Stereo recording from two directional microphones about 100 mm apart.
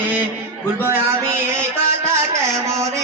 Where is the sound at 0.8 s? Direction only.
25° right (ahead or behind).